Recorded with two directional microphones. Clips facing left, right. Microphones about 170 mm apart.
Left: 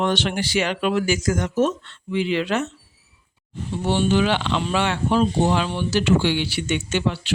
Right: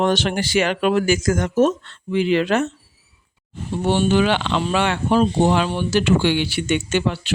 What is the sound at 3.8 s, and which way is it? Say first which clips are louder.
Speech: right 2 dB; 50° right (ahead or behind).